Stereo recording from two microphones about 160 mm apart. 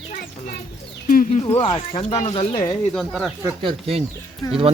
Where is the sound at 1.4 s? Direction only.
40° left (ahead or behind).